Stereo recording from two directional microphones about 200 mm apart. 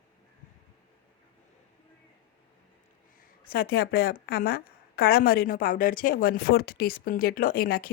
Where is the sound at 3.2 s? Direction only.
50° left (ahead or behind).